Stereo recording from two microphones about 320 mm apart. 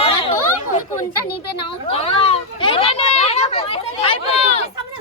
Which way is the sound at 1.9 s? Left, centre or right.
Centre.